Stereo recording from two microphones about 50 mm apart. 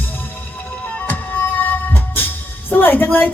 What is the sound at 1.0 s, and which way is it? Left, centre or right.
Music, left.